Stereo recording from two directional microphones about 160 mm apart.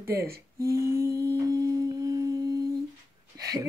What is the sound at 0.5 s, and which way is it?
Humming, 20° right (ahead or behind).